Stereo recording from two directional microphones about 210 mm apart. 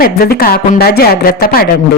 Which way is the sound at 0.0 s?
45° left (ahead or behind).